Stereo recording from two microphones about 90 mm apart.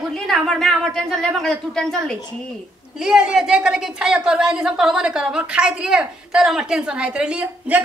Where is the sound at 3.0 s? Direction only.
5° right (ahead or behind).